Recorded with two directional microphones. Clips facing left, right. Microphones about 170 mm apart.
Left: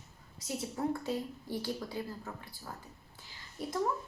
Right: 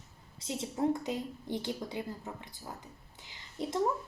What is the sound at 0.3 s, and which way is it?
A woman's voice, 25° right (ahead or behind).